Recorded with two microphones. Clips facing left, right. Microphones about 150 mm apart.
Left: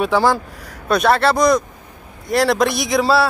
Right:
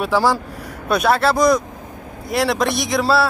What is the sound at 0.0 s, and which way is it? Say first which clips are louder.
Speech: left 1 dB; 5° right (ahead or behind).